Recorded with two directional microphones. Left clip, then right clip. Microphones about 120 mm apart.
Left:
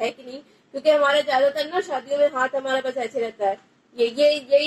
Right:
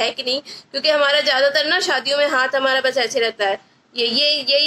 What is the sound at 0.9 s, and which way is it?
A woman's voice, 25° right (ahead or behind).